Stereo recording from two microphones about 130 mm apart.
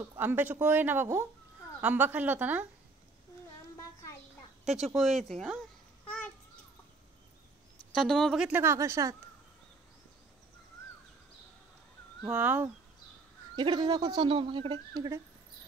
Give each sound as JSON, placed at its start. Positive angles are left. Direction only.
{"t": 0.2, "sound": "speech", "side_deg": -15}
{"t": 4.6, "sound": "speech", "side_deg": 0}
{"t": 7.9, "sound": "speech", "side_deg": 0}
{"t": 8.5, "sound": "speech", "side_deg": -20}
{"t": 12.2, "sound": "speech", "side_deg": -10}
{"t": 13.6, "sound": "speech", "side_deg": -35}